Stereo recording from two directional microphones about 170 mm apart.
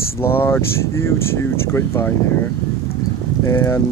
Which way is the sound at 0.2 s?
15° left (ahead or behind).